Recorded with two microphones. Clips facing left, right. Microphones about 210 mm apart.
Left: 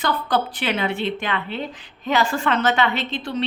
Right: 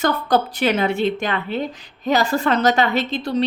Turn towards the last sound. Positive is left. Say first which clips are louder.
# right 5 dB
turn(degrees=-40)  # may be behind; listen again after turning